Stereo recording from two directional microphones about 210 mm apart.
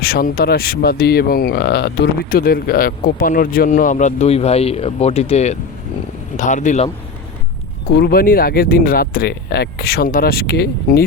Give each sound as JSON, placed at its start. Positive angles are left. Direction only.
{"t": 0.0, "sound": "speech", "side_deg": 45}
{"t": 7.9, "sound": "speech", "side_deg": 45}